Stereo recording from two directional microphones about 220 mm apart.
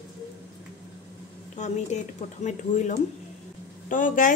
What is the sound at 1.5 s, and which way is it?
A woman's voice, 35° left (ahead or behind).